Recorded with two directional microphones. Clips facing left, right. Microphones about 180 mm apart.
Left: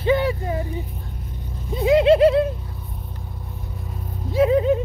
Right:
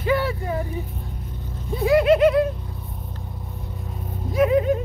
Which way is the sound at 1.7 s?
20° left (ahead or behind).